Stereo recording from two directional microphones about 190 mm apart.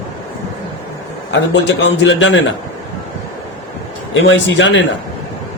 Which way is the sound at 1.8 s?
70° left (ahead or behind).